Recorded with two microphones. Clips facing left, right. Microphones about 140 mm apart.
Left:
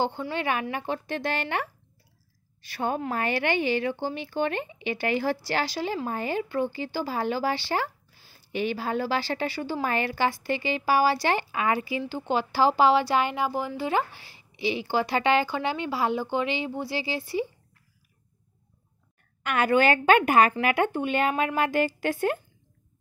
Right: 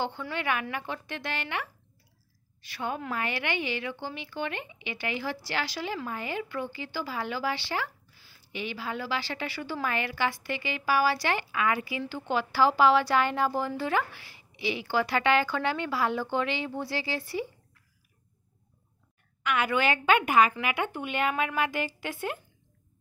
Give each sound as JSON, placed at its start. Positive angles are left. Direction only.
{"t": 0.0, "sound": "a woman's voice", "side_deg": 30}
{"t": 13.9, "sound": "speech", "side_deg": 30}
{"t": 19.4, "sound": "a woman's voice", "side_deg": 45}